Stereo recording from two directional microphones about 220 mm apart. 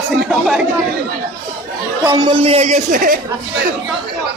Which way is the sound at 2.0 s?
15° right (ahead or behind).